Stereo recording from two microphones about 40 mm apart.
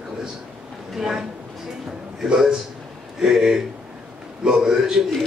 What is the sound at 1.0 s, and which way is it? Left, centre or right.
Speech, centre.